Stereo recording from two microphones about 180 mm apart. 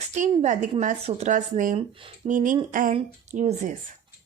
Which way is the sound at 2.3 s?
45° right (ahead or behind).